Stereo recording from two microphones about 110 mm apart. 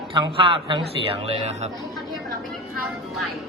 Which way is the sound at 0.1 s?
50° right (ahead or behind).